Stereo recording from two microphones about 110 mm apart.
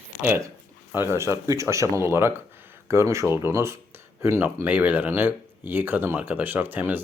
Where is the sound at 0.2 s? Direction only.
20° right (ahead or behind).